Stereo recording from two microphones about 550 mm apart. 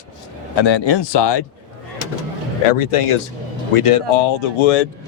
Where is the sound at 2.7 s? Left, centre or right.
Left.